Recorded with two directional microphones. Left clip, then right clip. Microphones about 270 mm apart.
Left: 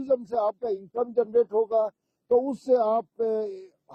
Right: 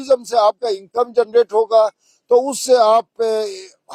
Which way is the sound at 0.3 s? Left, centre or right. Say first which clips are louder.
Right 12 dB; right.